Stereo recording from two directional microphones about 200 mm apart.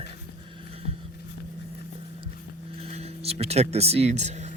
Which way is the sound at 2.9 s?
30° right (ahead or behind).